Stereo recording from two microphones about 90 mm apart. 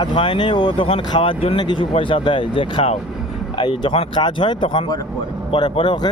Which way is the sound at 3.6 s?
60° left (ahead or behind).